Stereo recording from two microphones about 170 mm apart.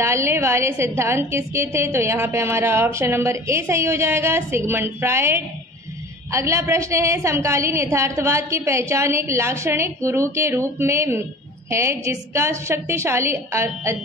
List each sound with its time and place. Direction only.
0.0 s a woman's voice: 15° right (ahead or behind)